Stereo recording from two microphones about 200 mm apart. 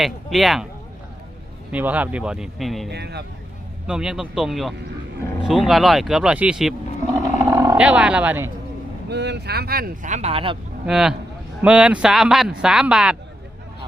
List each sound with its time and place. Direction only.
0.0 s a man's voice: centre (ahead or behind)
1.7 s a man's voice: 5° right (ahead or behind)
2.9 s speech: 55° right (ahead or behind)
3.8 s a man's voice: 5° right (ahead or behind)
7.2 s roaring cats: 15° right (ahead or behind)
7.8 s speech: 5° right (ahead or behind)
9.0 s speech: 60° right (ahead or behind); by 10.6 s 25° right (ahead or behind)
10.8 s a man's voice: 5° right (ahead or behind)